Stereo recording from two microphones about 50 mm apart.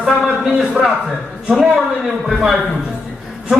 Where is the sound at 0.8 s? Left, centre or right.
Right.